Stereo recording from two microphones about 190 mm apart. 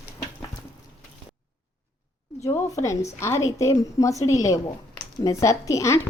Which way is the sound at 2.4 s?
15° left (ahead or behind).